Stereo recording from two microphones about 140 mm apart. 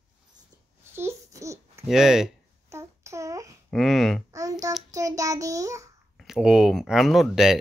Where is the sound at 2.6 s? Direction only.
20° right (ahead or behind).